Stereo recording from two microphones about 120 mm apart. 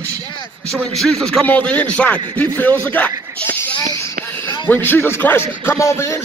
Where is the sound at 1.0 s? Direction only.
5° left (ahead or behind).